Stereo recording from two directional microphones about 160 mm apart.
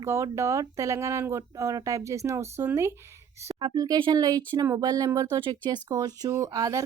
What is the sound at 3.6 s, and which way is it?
Speech, 25° right (ahead or behind).